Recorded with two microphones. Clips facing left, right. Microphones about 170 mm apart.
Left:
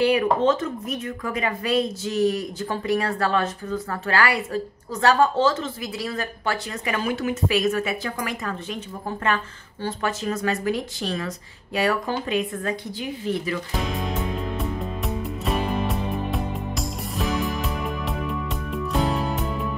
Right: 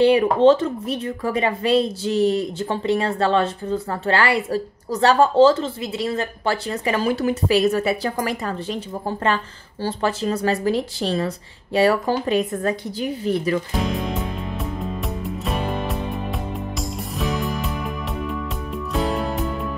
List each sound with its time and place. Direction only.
0.0 s a woman's voice: 30° right (ahead or behind)
15.4 s music: centre (ahead or behind)
17.2 s music: centre (ahead or behind)